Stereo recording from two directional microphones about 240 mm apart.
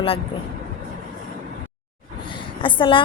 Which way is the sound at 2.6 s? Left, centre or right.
Left.